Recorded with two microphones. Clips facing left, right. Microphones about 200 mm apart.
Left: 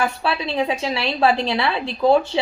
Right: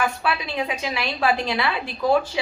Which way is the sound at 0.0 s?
30° left (ahead or behind).